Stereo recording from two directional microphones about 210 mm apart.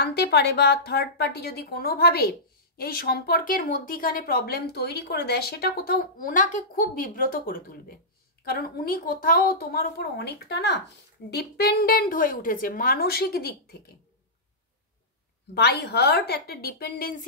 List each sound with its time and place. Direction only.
0.0 s speech: 50° left (ahead or behind)
15.5 s speech: 50° left (ahead or behind)